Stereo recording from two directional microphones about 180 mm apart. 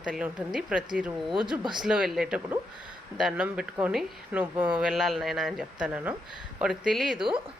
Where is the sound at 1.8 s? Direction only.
5° right (ahead or behind).